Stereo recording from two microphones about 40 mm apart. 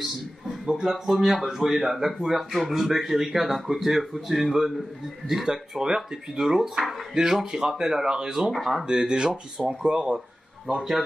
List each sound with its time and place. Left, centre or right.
0.7 s speech: centre
8.5 s speech: centre
8.8 s speech: centre
10.8 s speech: centre